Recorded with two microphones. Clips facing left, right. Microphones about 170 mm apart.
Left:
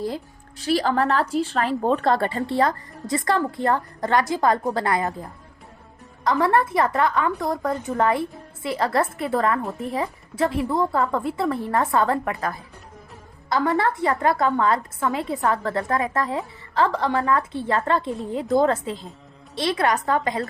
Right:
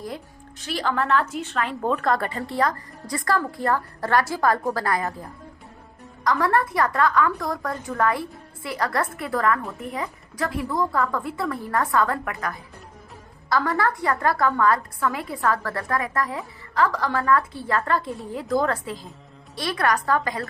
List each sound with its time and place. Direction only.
0.6 s a woman's voice: 35° left (ahead or behind); by 5.1 s 20° left (ahead or behind)
6.2 s a woman's voice: 25° left (ahead or behind)